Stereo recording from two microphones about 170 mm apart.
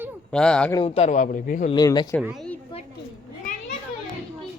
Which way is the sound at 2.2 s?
Centre (ahead or behind).